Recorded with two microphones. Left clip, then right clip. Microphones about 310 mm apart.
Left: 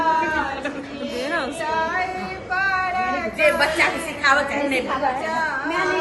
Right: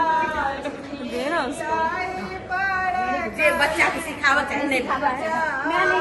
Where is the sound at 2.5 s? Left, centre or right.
Centre.